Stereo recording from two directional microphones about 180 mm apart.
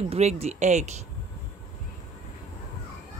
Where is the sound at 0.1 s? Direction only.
35° right (ahead or behind).